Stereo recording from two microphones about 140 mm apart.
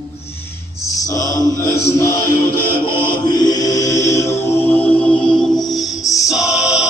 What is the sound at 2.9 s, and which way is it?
Music, 30° left (ahead or behind).